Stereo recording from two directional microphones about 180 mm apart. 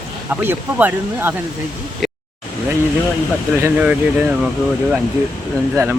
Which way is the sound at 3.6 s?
10° right (ahead or behind).